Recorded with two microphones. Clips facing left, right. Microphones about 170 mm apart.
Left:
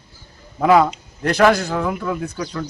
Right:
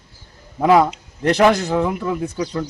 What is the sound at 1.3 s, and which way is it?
Speech, 20° right (ahead or behind).